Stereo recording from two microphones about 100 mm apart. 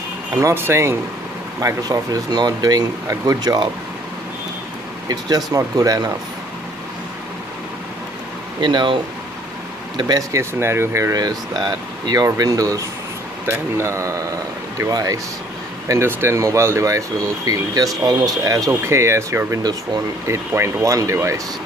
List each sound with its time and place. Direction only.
0.4 s speech: 25° right (ahead or behind)
1.6 s speech: 35° right (ahead or behind)
5.0 s speech: 40° right (ahead or behind)
8.5 s speech: 50° right (ahead or behind)
10.3 s speech: 25° right (ahead or behind)
15.9 s speech: 25° right (ahead or behind)